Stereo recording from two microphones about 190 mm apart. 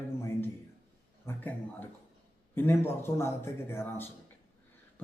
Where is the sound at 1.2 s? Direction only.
10° left (ahead or behind).